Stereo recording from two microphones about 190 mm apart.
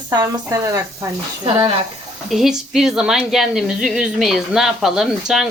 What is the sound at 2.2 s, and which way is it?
A woman's voice, centre (ahead or behind).